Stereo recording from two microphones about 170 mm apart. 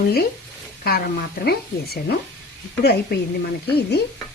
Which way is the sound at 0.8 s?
65° left (ahead or behind).